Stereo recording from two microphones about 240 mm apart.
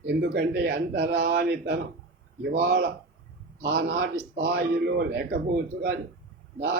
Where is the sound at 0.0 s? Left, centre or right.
Right.